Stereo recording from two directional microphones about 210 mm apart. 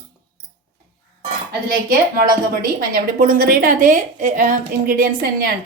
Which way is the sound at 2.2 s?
45° right (ahead or behind).